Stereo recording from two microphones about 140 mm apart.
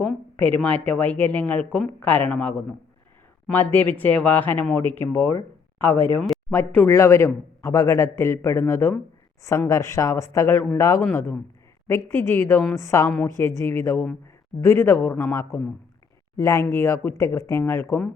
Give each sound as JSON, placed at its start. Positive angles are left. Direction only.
{"t": 0.0, "sound": "a man's voice", "side_deg": 10}